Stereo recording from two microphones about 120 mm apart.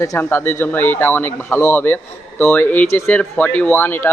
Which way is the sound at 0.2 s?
20° left (ahead or behind).